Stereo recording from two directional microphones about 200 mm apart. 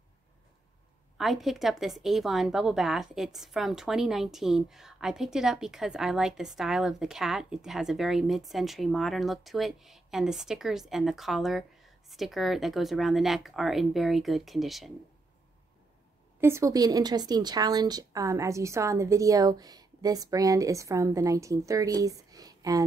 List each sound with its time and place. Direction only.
1.1 s a woman's voice: centre (ahead or behind)
16.3 s a woman's voice: 15° right (ahead or behind)